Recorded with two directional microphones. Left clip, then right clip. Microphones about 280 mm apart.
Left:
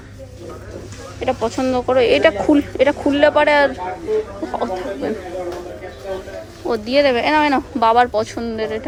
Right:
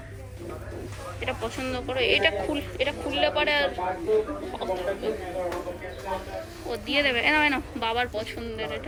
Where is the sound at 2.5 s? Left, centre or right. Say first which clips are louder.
Left 13 dB; left.